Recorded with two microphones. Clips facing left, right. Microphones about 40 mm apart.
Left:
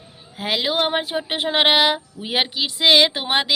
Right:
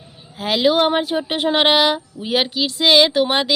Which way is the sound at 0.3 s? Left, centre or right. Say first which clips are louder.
Right 5 dB; centre.